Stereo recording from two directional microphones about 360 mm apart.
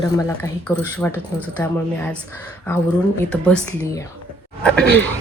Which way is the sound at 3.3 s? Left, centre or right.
Centre.